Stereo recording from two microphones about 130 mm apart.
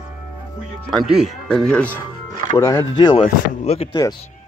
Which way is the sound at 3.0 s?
35° left (ahead or behind).